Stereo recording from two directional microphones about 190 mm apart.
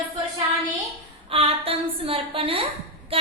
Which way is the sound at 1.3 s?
30° right (ahead or behind).